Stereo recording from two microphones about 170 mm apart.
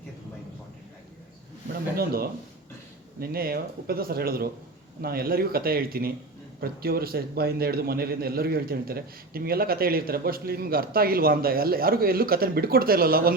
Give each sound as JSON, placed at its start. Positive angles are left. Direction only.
{"t": 1.6, "sound": "a man's voice", "side_deg": -60}